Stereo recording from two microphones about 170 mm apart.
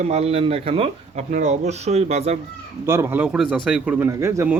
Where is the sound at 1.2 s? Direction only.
45° right (ahead or behind).